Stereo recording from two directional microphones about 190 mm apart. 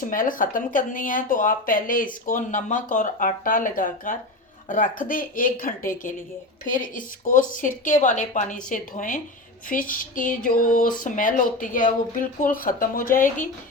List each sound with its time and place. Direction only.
0.0 s speech: 45° left (ahead or behind)